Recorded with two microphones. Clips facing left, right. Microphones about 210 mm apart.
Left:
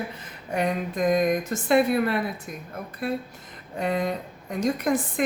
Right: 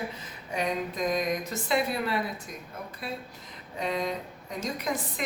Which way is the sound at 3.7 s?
55° left (ahead or behind).